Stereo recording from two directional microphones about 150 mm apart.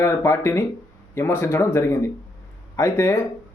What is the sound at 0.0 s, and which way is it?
Speech, 20° left (ahead or behind).